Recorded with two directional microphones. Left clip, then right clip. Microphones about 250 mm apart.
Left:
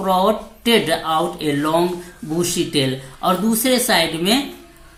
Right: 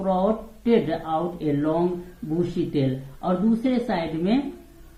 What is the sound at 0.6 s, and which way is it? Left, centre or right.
Speech, centre.